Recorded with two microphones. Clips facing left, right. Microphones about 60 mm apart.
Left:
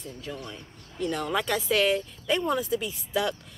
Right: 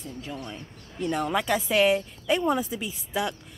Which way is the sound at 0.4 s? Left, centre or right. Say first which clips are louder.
Right 2 dB; right.